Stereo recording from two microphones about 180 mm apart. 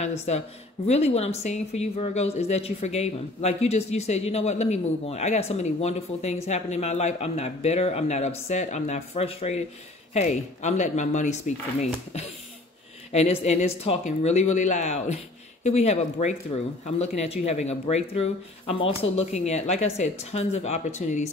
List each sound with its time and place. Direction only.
0.0 s a woman's voice: 35° left (ahead or behind)